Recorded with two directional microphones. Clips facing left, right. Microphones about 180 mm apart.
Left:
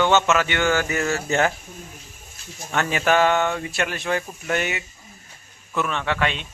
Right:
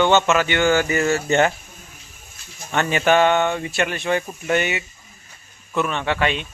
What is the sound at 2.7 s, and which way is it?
A man's voice, centre (ahead or behind).